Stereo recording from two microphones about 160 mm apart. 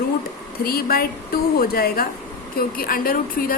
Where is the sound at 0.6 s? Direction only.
75° left (ahead or behind).